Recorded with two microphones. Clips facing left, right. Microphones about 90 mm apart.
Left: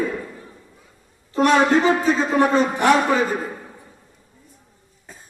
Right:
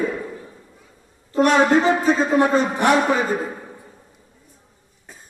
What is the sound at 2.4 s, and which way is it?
Speech, 25° right (ahead or behind).